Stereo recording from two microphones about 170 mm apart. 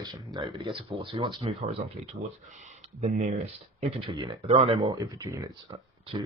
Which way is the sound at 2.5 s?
45° right (ahead or behind).